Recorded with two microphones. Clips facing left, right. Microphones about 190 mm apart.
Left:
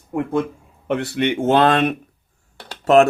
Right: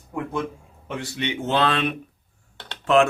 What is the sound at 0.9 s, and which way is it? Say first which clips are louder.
Speech: left 8 dB; 65° left (ahead or behind).